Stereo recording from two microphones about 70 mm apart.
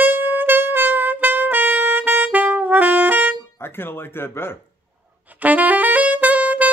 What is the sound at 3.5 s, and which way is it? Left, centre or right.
Speech, left.